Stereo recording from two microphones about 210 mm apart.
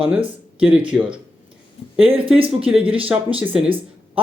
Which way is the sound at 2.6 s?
5° right (ahead or behind).